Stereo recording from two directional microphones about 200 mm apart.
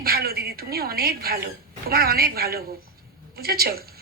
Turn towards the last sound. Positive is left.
turn(degrees=-50)  # may be behind; listen again after turning